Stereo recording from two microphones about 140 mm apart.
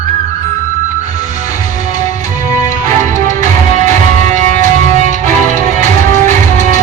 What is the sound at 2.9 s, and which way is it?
Music, 60° right (ahead or behind).